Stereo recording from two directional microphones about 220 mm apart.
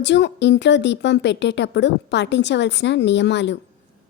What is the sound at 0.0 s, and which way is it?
Speech, 50° left (ahead or behind).